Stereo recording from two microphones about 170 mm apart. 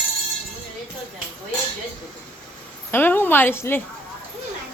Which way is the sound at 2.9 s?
10° left (ahead or behind).